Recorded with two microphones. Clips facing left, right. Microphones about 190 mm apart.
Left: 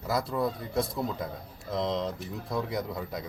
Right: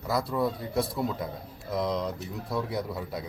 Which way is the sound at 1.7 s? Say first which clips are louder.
Right 1 dB; 20° left (ahead or behind).